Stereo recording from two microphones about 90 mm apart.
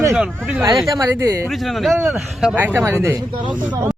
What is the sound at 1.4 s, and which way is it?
A man's voice, centre (ahead or behind).